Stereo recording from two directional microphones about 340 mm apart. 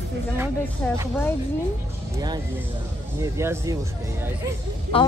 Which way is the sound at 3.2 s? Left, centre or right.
Centre.